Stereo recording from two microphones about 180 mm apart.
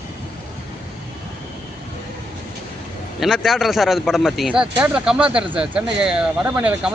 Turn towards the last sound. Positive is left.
turn(degrees=-5)  # may be behind; listen again after turning